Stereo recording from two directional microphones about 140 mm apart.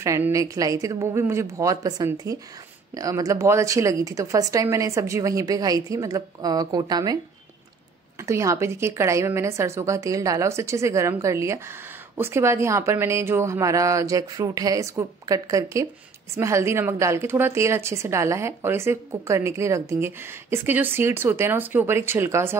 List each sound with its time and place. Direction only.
0.0 s speech: 20° right (ahead or behind)
8.3 s a woman's voice: 20° right (ahead or behind)